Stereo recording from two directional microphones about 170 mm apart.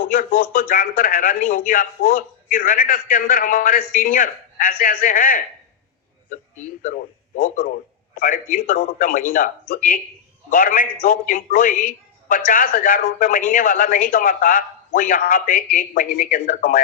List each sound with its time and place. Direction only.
0.1 s a man's voice: 55° left (ahead or behind)